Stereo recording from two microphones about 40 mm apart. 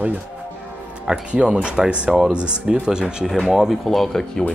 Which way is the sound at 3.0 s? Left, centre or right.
Centre.